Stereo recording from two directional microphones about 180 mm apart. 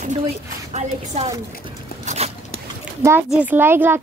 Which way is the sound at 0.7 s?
35° right (ahead or behind).